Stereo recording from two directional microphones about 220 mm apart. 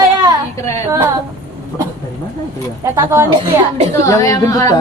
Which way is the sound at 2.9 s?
10° right (ahead or behind).